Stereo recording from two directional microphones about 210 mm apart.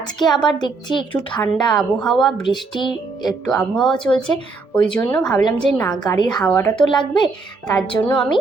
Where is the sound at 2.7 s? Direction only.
25° left (ahead or behind).